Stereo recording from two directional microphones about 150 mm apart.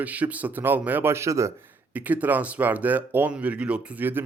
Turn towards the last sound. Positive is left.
turn(degrees=-10)  # may be behind; listen again after turning